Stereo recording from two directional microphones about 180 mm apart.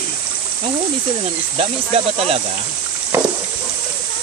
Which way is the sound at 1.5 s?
35° right (ahead or behind).